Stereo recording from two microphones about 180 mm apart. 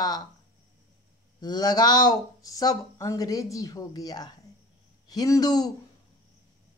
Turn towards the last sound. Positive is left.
turn(degrees=20)  # may be behind; listen again after turning